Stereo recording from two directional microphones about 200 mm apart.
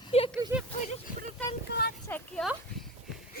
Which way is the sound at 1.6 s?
55° left (ahead or behind).